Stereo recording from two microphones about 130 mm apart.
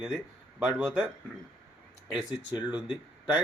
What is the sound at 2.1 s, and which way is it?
Speech, 10° right (ahead or behind).